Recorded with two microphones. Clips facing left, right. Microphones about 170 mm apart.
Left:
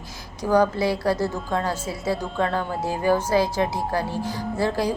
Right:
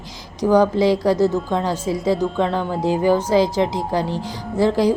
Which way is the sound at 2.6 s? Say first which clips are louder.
Right 6 dB; 15° right (ahead or behind).